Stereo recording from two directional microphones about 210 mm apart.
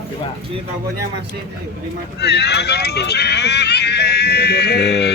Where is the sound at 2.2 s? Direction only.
50° left (ahead or behind).